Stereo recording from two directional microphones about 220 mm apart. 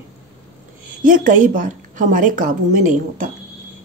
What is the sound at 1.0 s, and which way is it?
A woman's voice, 35° right (ahead or behind).